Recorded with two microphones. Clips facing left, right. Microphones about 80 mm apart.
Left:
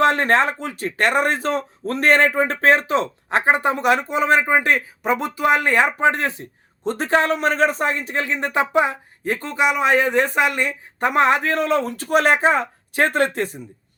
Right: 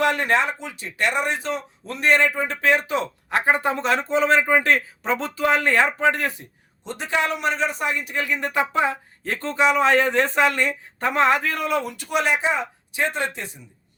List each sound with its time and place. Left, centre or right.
0.0 s speech: left
6.8 s a man's voice: left